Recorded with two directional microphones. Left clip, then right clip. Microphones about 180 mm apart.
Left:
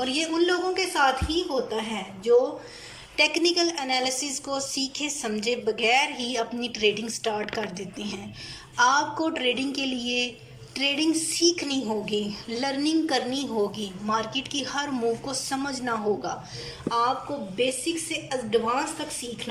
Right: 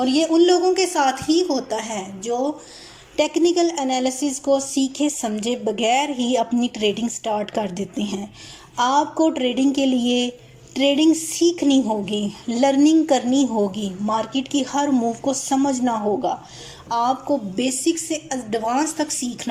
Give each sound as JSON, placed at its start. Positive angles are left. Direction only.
{"t": 0.0, "sound": "a woman's voice", "side_deg": -40}
{"t": 3.2, "sound": "a woman's voice", "side_deg": -40}
{"t": 17.6, "sound": "a woman's voice", "side_deg": -50}